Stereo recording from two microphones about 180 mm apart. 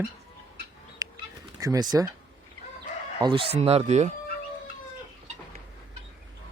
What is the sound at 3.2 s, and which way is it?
Speech, 25° right (ahead or behind).